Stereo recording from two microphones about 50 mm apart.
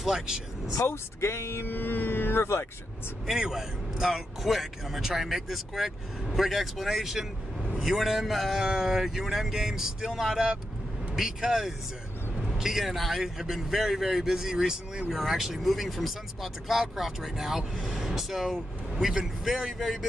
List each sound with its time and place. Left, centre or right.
0.0 s a man's voice: centre
0.8 s speech: left
3.3 s speech: centre
8.6 s a man's voice: centre